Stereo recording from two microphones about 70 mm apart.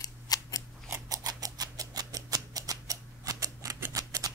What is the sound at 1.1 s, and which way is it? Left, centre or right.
Tick-tock, right.